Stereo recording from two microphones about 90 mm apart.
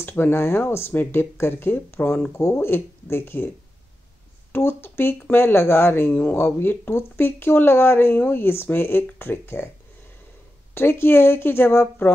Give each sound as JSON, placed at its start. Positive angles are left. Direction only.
{"t": 0.0, "sound": "speech", "side_deg": 25}
{"t": 4.5, "sound": "speech", "side_deg": 25}
{"t": 10.7, "sound": "speech", "side_deg": 25}